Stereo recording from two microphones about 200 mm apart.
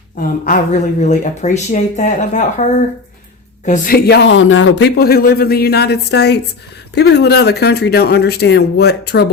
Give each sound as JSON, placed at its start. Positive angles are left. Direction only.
{"t": 0.2, "sound": "speech", "side_deg": 40}
{"t": 3.7, "sound": "a man's voice", "side_deg": 50}